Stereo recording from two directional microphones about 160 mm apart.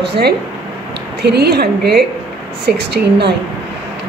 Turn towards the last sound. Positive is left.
turn(degrees=-90)